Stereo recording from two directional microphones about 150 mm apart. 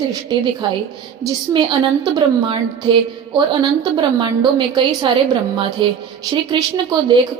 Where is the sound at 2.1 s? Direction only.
30° right (ahead or behind).